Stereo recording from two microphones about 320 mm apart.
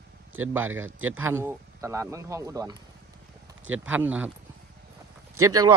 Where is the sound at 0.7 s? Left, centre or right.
Right.